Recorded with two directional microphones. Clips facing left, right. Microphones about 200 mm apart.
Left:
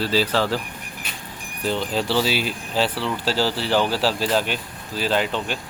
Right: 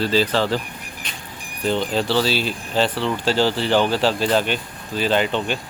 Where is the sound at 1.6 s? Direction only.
5° left (ahead or behind).